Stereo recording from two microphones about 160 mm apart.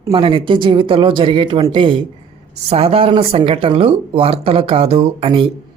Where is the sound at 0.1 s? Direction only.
30° right (ahead or behind).